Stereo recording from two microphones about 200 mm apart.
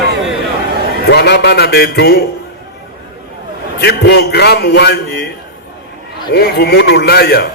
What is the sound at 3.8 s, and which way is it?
Speech, 55° left (ahead or behind).